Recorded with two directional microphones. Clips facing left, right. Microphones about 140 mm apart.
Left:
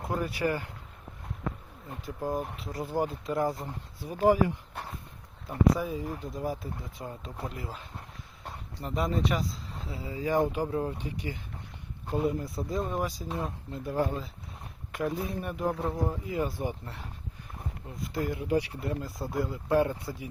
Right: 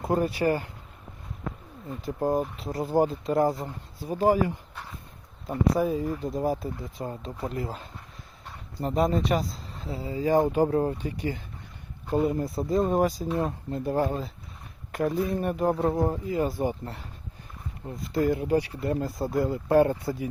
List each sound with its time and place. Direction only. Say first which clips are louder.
0.1 s speech: right 6 dB; 35° right (ahead or behind)
2.1 s speech: right 6 dB; 40° right (ahead or behind)
5.7 s speech: right 7 dB; 45° right (ahead or behind); by 7.5 s 30° right (ahead or behind)
7.5 s speech: right 7 dB; 40° right (ahead or behind)
18.1 s speech: right 5 dB; 40° right (ahead or behind)